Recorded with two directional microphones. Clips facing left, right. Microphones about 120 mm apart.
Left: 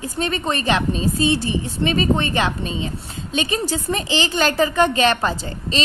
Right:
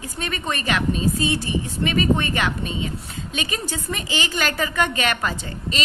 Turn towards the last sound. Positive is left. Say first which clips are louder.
# left 4 dB
turn(degrees=30)  # may be behind; listen again after turning